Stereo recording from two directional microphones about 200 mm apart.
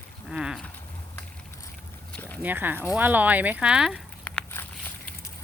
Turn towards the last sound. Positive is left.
turn(degrees=10)  # may be behind; listen again after turning